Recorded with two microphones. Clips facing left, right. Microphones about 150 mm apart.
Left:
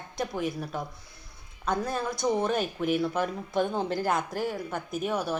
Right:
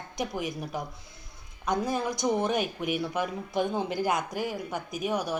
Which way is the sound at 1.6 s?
15° right (ahead or behind).